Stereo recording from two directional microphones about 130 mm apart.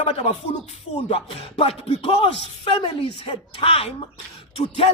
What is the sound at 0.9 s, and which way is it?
Speech, 45° left (ahead or behind).